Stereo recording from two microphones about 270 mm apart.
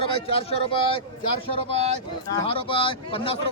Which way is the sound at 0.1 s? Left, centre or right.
Left.